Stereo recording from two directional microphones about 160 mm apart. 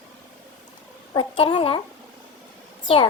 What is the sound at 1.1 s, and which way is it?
Speech, 35° left (ahead or behind).